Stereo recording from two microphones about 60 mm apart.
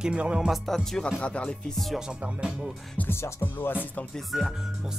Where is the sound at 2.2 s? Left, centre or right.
Centre.